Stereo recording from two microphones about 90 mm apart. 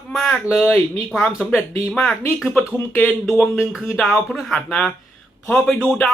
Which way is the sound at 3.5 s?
10° right (ahead or behind).